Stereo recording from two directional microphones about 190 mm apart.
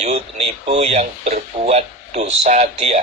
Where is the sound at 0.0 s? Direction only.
30° right (ahead or behind).